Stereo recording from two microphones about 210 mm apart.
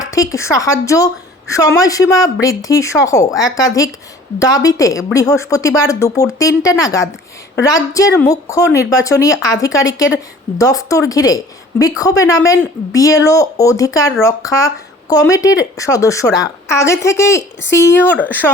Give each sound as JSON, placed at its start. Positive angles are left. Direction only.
{"t": 0.0, "sound": "a woman's voice", "side_deg": 15}